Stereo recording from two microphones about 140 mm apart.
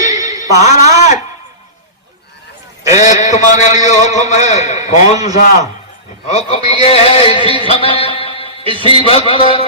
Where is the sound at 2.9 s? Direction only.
60° left (ahead or behind).